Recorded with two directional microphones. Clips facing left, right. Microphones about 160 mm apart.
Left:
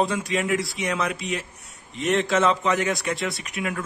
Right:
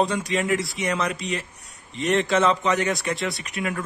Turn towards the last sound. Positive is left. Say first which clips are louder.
# right 1 dB
turn(degrees=0)  # may be behind; listen again after turning